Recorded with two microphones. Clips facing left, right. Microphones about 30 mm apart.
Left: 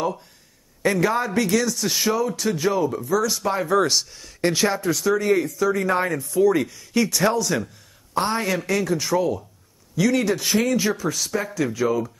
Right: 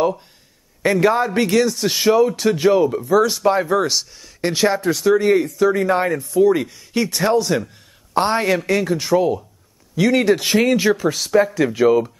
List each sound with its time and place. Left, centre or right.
0.9 s speech: right
8.1 s speech: right